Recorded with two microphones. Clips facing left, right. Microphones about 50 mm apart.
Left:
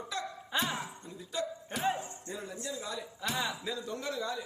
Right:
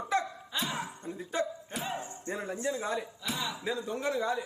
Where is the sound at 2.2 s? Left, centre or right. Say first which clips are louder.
Right 6 dB; right.